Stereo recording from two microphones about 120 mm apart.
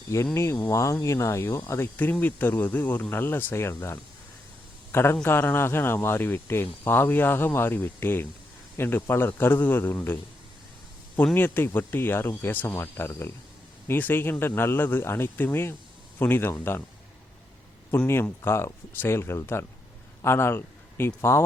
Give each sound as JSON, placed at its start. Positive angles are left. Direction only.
{"t": 0.3, "sound": "a man's voice", "side_deg": 20}
{"t": 11.3, "sound": "a man's voice", "side_deg": 15}
{"t": 17.9, "sound": "a man's voice", "side_deg": 15}